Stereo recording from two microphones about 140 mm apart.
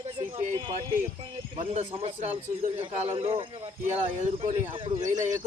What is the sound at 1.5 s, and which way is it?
A man's voice, 45° right (ahead or behind).